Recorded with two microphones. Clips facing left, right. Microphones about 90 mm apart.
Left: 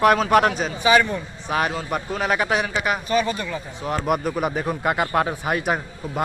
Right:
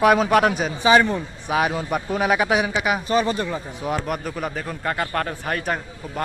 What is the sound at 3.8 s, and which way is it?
Speech, centre (ahead or behind).